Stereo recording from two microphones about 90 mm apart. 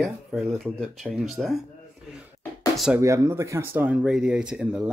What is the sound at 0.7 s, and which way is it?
Speech, centre (ahead or behind).